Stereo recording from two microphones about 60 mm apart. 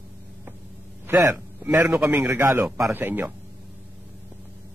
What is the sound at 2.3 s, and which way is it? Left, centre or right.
Speech, right.